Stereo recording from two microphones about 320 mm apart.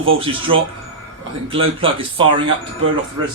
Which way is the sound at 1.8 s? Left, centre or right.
Centre.